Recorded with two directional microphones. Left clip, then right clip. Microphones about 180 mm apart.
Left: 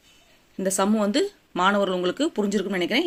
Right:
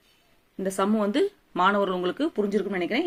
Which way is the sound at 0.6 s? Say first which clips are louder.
Left 2 dB; 20° left (ahead or behind).